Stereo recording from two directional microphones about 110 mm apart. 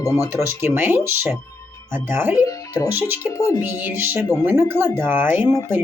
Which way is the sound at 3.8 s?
20° right (ahead or behind).